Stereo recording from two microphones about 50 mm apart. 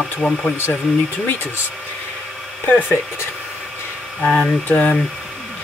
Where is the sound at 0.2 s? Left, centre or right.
Left.